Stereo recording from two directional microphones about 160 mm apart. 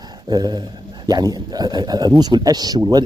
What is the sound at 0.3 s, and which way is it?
A man's voice, 25° right (ahead or behind).